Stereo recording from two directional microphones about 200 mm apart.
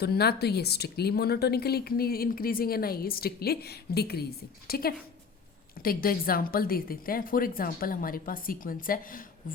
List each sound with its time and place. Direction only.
0.0 s a woman's voice: 50° left (ahead or behind)